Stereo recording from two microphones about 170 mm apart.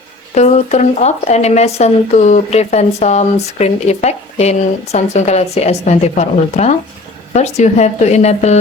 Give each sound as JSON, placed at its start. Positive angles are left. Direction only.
{"t": 0.3, "sound": "speech", "side_deg": 40}